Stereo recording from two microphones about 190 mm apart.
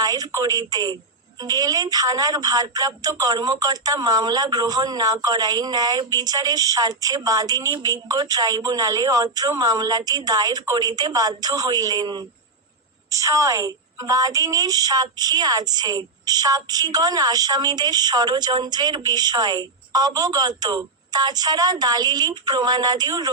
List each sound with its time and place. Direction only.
0.0 s speech: 20° right (ahead or behind)